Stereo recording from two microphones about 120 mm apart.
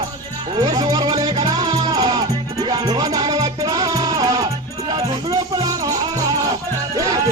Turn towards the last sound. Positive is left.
turn(degrees=-30)  # may be behind; listen again after turning